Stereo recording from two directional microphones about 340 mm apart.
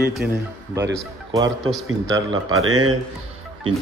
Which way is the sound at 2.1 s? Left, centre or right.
Right.